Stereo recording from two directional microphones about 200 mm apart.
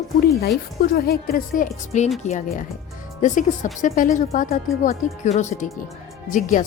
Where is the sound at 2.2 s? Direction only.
35° left (ahead or behind).